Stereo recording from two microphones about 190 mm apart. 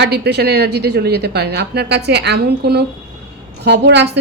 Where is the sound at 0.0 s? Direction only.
60° right (ahead or behind).